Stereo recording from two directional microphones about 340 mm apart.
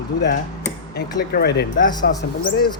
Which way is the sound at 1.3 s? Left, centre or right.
Left.